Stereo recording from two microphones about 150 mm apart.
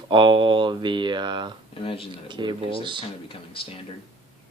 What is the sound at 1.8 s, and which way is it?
Speech, 35° left (ahead or behind).